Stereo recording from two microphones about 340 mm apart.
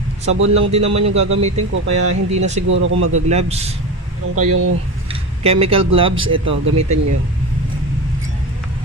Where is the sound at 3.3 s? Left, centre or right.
Centre.